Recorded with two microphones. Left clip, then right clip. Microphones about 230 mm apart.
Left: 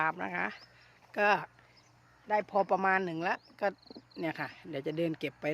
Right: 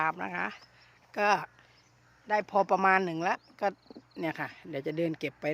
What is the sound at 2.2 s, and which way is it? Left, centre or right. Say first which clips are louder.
Speech: right 2 dB; centre.